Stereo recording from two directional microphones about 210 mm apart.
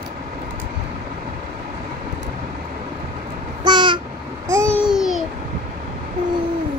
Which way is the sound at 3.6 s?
20° right (ahead or behind).